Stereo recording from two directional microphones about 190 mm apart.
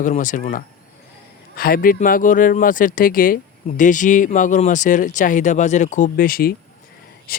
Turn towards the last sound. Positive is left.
turn(degrees=50)  # may be behind; listen again after turning